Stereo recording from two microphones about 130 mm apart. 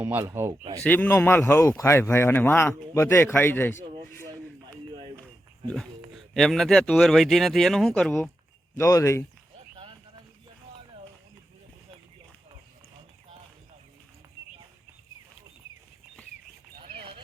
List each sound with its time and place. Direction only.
0.0 s speech: 15° right (ahead or behind)
0.8 s a man's voice: 15° left (ahead or behind)
5.1 s a sound: 10° left (ahead or behind)
6.1 s speech: centre (ahead or behind)
8.7 s a man's voice: 20° left (ahead or behind)
16.8 s a sound: 40° right (ahead or behind)